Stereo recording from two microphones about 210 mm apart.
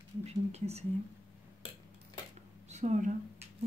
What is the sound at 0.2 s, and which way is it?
Speech, 30° right (ahead or behind).